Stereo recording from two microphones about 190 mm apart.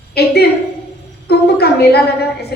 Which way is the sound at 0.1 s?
55° left (ahead or behind).